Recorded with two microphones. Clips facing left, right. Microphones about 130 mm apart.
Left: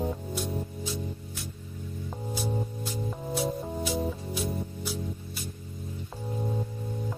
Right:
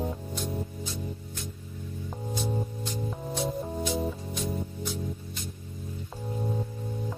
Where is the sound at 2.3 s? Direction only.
5° left (ahead or behind).